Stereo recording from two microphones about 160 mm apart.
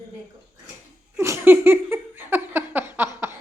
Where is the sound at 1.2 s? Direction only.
15° right (ahead or behind).